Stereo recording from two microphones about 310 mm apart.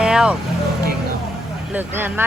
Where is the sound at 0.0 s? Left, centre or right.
Centre.